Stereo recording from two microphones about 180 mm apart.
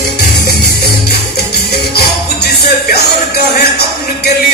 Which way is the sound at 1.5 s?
60° left (ahead or behind).